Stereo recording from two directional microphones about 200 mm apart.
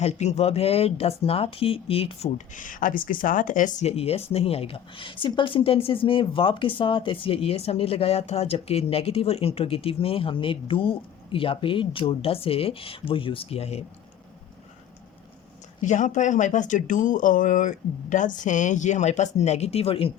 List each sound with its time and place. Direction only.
0.0 s speech: 35° left (ahead or behind)
15.8 s speech: 40° left (ahead or behind)